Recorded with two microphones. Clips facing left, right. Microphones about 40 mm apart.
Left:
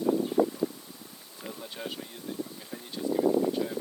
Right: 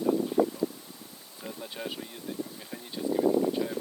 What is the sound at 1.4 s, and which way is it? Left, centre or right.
Bee, centre.